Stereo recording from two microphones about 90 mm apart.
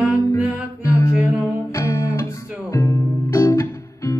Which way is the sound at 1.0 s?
35° left (ahead or behind).